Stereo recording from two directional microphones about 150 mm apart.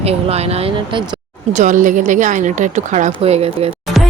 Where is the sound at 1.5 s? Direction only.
55° right (ahead or behind).